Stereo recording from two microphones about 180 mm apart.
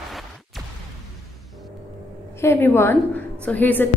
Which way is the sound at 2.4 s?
15° left (ahead or behind).